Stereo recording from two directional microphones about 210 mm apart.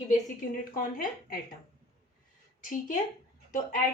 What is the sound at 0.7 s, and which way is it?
Speech, 40° left (ahead or behind).